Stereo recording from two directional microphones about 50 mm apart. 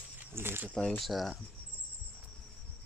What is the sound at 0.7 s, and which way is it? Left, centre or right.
Speech, centre.